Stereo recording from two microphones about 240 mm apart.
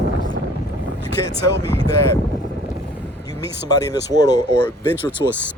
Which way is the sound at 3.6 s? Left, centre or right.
Centre.